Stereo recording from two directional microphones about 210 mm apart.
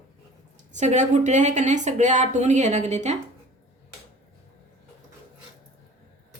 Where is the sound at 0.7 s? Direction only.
35° right (ahead or behind).